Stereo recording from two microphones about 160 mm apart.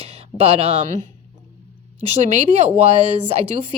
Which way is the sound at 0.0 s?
40° right (ahead or behind).